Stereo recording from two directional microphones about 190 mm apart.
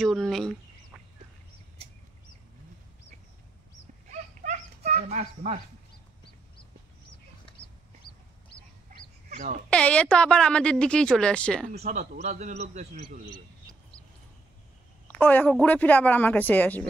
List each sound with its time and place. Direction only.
0.0 s speech: centre (ahead or behind)
0.9 s a sound: 5° right (ahead or behind)
4.1 s dog: 40° right (ahead or behind)
5.1 s a man's voice: 35° right (ahead or behind)
8.0 s chicken: 55° left (ahead or behind)
8.5 s fowl: 30° left (ahead or behind)
9.3 s speech: 40° right (ahead or behind)
9.7 s speech: 5° left (ahead or behind)
11.7 s a man's voice: 35° right (ahead or behind)
15.0 s speech: 10° left (ahead or behind)